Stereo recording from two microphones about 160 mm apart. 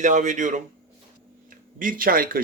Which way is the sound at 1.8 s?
60° right (ahead or behind).